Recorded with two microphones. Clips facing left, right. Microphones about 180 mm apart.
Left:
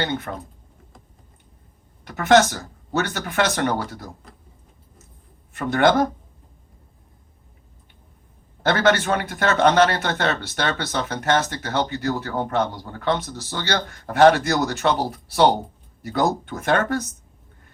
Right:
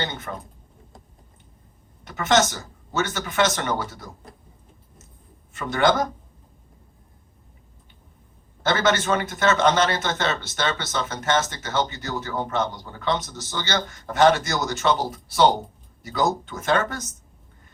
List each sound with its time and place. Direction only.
0.0 s a man's voice: 60° left (ahead or behind)
2.0 s a man's voice: 60° left (ahead or behind)
5.5 s a man's voice: 60° left (ahead or behind)
8.6 s a man's voice: 60° left (ahead or behind)